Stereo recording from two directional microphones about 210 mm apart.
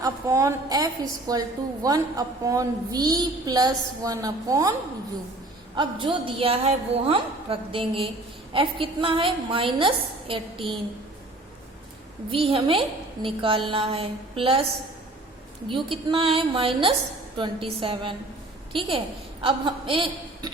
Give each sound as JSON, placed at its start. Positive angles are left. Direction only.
{"t": 0.0, "sound": "a woman's voice", "side_deg": -15}
{"t": 5.7, "sound": "a woman's voice", "side_deg": -20}
{"t": 12.3, "sound": "a woman's voice", "side_deg": -25}
{"t": 15.7, "sound": "a woman's voice", "side_deg": -25}